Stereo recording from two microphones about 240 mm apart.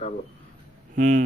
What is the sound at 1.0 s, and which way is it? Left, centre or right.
Speech, right.